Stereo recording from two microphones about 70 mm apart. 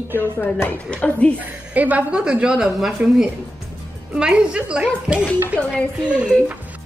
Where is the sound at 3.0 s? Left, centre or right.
Right.